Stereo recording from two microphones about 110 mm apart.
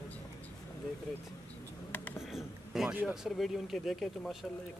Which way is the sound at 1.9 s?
15° left (ahead or behind).